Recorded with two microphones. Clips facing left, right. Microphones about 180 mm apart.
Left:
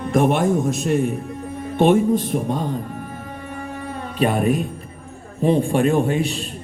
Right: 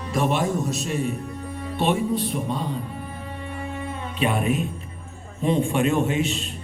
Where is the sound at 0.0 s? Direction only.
50° left (ahead or behind).